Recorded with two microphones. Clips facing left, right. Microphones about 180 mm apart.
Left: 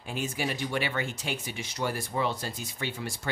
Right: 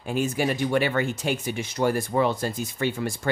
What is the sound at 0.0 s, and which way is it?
Speech, 50° right (ahead or behind).